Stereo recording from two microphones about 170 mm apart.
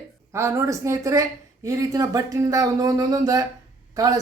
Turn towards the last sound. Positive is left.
turn(degrees=-20)  # may be behind; listen again after turning